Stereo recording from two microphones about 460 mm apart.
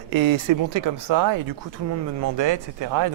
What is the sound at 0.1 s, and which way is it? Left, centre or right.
Speech, right.